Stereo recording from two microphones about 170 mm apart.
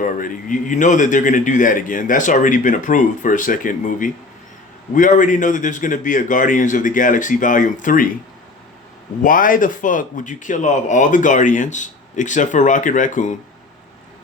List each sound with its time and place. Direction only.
0.0 s a man's voice: 50° left (ahead or behind)
9.2 s a man's voice: 55° left (ahead or behind)